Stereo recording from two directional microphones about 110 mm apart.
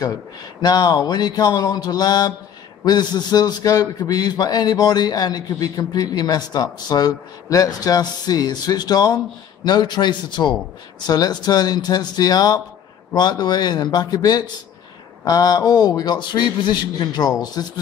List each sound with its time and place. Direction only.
0.0 s a man's voice: 35° left (ahead or behind)